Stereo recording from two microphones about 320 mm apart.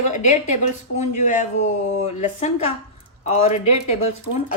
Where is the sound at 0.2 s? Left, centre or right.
Left.